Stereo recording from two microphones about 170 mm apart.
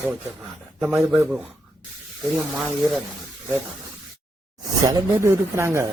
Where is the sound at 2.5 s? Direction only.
Centre (ahead or behind).